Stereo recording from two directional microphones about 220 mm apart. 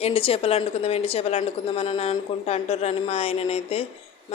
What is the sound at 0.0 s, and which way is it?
Speech, 25° left (ahead or behind).